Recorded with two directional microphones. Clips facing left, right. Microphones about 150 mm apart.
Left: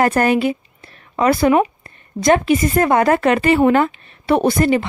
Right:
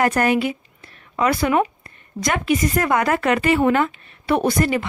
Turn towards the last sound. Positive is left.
turn(degrees=30)  # may be behind; listen again after turning